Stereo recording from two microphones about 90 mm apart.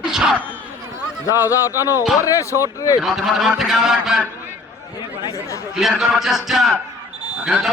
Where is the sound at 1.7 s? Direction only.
35° left (ahead or behind).